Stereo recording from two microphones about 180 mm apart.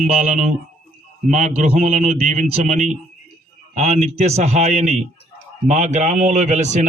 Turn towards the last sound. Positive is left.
turn(degrees=-40)  # may be behind; listen again after turning